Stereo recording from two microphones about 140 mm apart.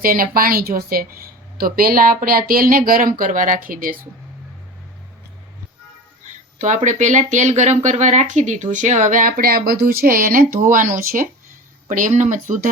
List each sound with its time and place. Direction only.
0.0 s a woman's voice: 90° right
6.2 s speech: 60° right (ahead or behind); by 10.4 s 85° right
10.6 s speech: 70° right (ahead or behind)